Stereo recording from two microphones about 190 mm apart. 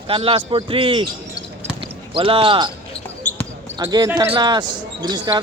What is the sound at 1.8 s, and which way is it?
Basketball bounce, 30° right (ahead or behind).